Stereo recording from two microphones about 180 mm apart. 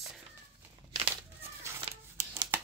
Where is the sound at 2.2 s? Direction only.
15° right (ahead or behind).